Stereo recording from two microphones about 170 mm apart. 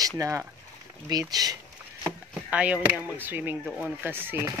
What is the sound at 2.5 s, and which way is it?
Speech, 10° right (ahead or behind).